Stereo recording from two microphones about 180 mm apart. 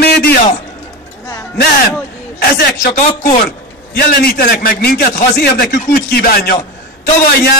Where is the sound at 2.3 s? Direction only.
55° left (ahead or behind).